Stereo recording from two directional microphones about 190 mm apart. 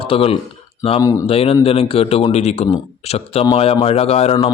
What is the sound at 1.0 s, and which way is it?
Speech, 15° left (ahead or behind).